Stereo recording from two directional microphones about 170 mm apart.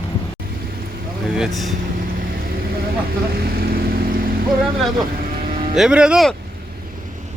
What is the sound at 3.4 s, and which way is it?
Vehicle, 60° right (ahead or behind).